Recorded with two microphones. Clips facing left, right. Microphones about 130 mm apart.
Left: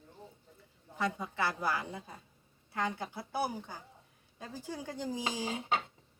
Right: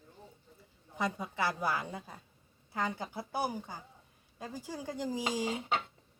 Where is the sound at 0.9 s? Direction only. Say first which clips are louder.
Even; 15° right (ahead or behind).